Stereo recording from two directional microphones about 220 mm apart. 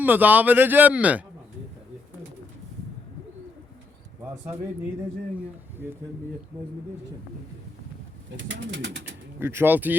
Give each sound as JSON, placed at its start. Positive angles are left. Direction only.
{"t": 0.0, "sound": "speech", "side_deg": -10}
{"t": 8.4, "sound": "speech", "side_deg": -55}
{"t": 9.4, "sound": "speech", "side_deg": -10}